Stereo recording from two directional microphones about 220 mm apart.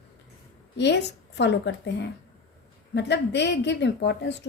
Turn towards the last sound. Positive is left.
turn(degrees=50)  # may be behind; listen again after turning